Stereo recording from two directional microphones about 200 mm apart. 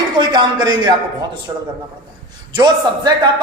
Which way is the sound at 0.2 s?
20° right (ahead or behind).